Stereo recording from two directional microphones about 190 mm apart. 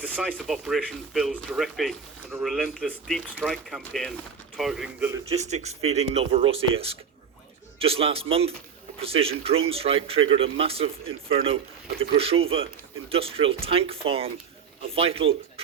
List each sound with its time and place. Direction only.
0.1 s speech: 5° left (ahead or behind)
5.3 s speech: 35° right (ahead or behind)